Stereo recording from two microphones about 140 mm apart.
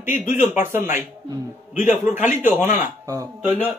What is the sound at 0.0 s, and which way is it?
Speech, 15° right (ahead or behind).